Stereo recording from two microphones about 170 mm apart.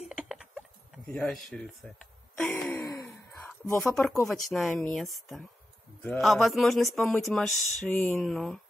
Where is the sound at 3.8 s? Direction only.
Centre (ahead or behind).